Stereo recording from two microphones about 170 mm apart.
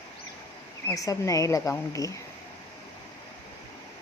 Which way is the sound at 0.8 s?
20° left (ahead or behind).